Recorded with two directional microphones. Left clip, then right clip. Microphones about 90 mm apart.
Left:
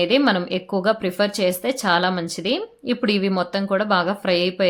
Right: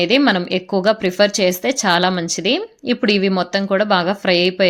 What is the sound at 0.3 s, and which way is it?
A woman's voice, 25° right (ahead or behind).